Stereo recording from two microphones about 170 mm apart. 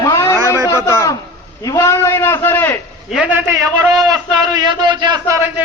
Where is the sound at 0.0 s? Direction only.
20° left (ahead or behind).